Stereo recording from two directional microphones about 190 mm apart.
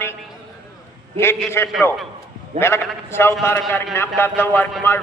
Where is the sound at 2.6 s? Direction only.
15° left (ahead or behind).